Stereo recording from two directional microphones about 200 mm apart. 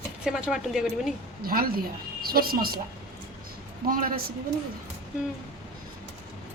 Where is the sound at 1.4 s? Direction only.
50° right (ahead or behind).